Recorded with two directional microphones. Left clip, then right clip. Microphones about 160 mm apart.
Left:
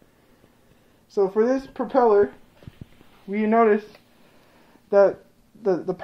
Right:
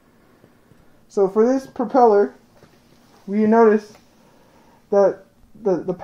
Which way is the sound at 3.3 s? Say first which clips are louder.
Right 4 dB; 50° right (ahead or behind).